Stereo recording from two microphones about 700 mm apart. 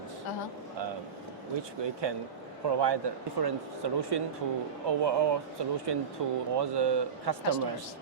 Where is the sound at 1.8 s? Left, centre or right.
Right.